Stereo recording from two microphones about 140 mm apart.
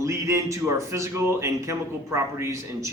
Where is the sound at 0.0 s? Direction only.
20° right (ahead or behind).